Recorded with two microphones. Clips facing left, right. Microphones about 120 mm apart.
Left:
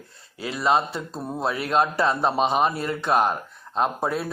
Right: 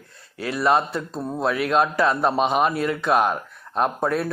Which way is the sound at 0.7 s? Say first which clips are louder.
Right 1 dB; centre (ahead or behind).